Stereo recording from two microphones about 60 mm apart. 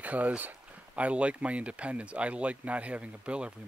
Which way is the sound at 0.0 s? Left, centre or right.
Right.